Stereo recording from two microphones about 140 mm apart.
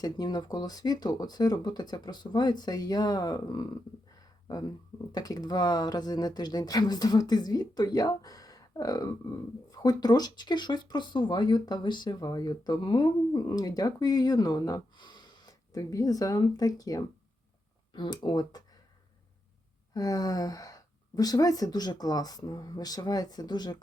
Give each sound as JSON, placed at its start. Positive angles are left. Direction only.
{"t": 0.0, "sound": "speech", "side_deg": 30}
{"t": 19.9, "sound": "speech", "side_deg": 25}